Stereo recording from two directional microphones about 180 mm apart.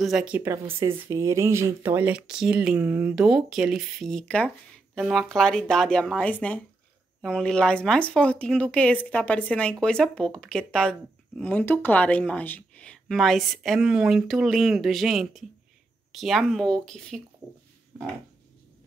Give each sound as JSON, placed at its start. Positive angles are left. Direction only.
{"t": 0.0, "sound": "speech", "side_deg": -5}